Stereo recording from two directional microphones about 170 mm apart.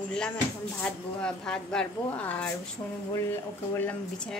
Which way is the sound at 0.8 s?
5° left (ahead or behind).